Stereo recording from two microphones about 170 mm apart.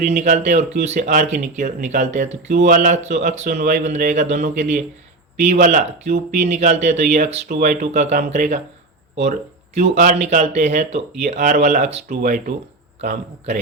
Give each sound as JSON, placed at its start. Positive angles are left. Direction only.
{"t": 0.1, "sound": "speech", "side_deg": -40}
{"t": 9.7, "sound": "speech", "side_deg": -40}
{"t": 12.0, "sound": "speech", "side_deg": -55}